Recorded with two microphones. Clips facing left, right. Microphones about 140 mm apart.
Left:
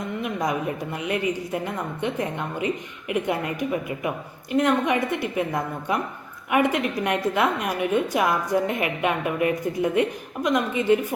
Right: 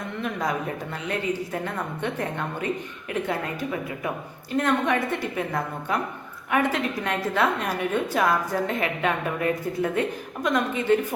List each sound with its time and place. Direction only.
0.2 s a sound: 15° left (ahead or behind)
0.9 s a woman's voice: 15° left (ahead or behind)
6.5 s a woman's voice: 15° left (ahead or behind)